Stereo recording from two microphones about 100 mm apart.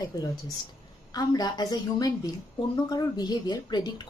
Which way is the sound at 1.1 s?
40° left (ahead or behind).